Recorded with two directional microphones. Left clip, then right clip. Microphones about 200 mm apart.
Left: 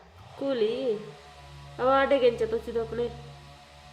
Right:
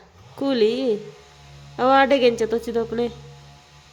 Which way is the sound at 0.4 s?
45° right (ahead or behind).